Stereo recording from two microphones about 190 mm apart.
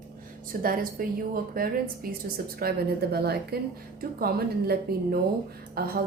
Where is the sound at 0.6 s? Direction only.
50° right (ahead or behind).